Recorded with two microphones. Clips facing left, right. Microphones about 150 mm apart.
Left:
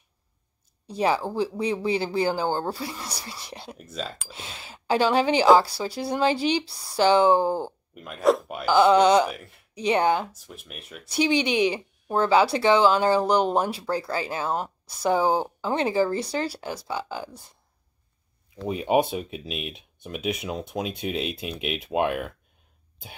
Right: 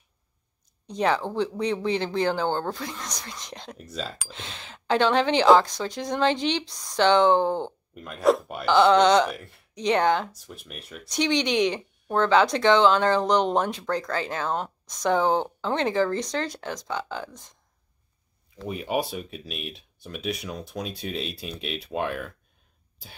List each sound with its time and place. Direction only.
0.8 s speech: 10° left (ahead or behind)
18.6 s speech: 20° left (ahead or behind)